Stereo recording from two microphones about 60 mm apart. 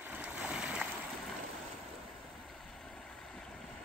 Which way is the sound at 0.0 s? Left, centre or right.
Right.